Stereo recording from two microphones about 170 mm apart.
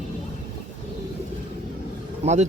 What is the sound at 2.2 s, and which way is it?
Speech, 45° right (ahead or behind).